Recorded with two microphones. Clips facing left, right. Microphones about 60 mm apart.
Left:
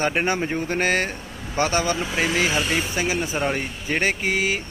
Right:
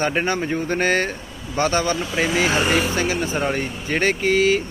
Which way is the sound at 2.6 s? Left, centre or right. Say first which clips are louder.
Right 5 dB; right.